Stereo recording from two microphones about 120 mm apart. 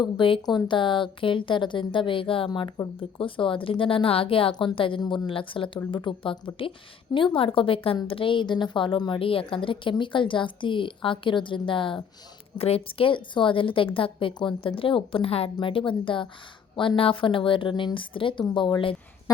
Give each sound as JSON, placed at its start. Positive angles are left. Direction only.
{"t": 0.0, "sound": "a woman's voice", "side_deg": 40}
{"t": 12.5, "sound": "a woman's voice", "side_deg": 55}